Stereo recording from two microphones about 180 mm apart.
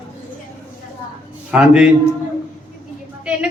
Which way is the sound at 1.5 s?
5° right (ahead or behind).